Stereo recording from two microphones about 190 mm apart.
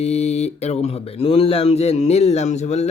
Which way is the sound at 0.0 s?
35° left (ahead or behind).